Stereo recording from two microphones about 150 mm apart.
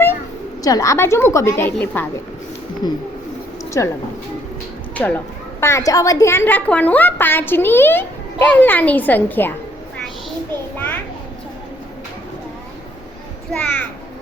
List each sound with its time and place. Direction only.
0.6 s a woman's voice: 25° left (ahead or behind)
2.8 s a woman's voice: 25° left (ahead or behind)
4.9 s a woman's voice: 10° left (ahead or behind)
10.8 s a woman's voice: 10° left (ahead or behind)
13.5 s a child's voice: 5° left (ahead or behind)